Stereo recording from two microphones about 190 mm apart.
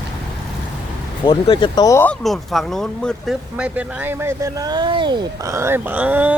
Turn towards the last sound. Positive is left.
turn(degrees=-10)  # may be behind; listen again after turning